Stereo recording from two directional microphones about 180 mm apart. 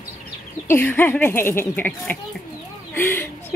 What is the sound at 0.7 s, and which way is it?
Speech, 10° left (ahead or behind).